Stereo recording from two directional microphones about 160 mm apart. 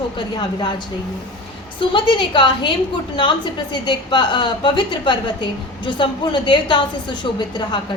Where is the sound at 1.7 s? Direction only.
30° left (ahead or behind).